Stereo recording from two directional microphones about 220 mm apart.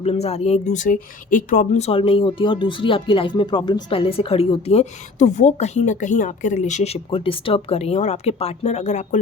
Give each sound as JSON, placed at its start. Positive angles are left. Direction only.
{"t": 0.0, "sound": "speech", "side_deg": 30}